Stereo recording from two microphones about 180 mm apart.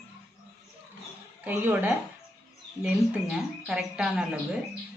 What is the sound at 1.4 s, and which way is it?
Speech, 10° right (ahead or behind).